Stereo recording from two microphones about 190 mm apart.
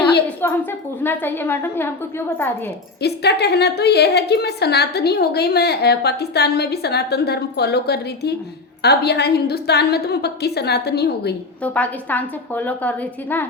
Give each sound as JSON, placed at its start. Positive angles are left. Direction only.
{"t": 0.4, "sound": "a woman's voice", "side_deg": 10}
{"t": 3.0, "sound": "a woman's voice", "side_deg": 60}
{"t": 11.6, "sound": "a woman's voice", "side_deg": 10}